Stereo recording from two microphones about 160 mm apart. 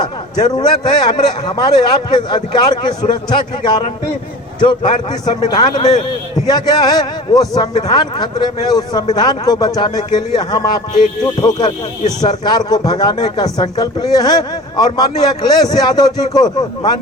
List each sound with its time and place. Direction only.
0.0 s speech: 25° left (ahead or behind)
7.7 s speech: 40° left (ahead or behind)
7.9 s speech: 25° left (ahead or behind)